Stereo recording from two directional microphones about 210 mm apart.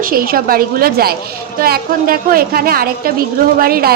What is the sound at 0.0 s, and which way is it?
A woman's voice, 45° right (ahead or behind).